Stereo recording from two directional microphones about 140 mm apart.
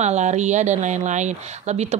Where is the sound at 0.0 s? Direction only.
55° right (ahead or behind).